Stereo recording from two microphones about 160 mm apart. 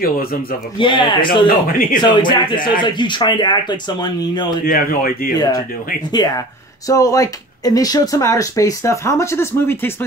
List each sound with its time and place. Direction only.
0.0 s speech: 65° left (ahead or behind)
0.7 s speech: 30° left (ahead or behind)
1.7 s speech: 60° left (ahead or behind)
2.0 s speech: 30° left (ahead or behind)
4.6 s speech: 65° left (ahead or behind)
6.1 s speech: 25° left (ahead or behind)